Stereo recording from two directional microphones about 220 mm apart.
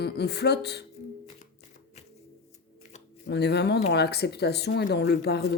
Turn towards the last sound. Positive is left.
turn(degrees=50)  # may be behind; listen again after turning